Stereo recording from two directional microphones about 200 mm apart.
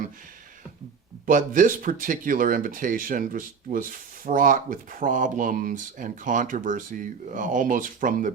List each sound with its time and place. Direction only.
1.3 s speech: 40° right (ahead or behind)